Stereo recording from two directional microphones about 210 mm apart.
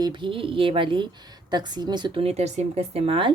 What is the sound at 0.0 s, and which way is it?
A woman's voice, 20° right (ahead or behind).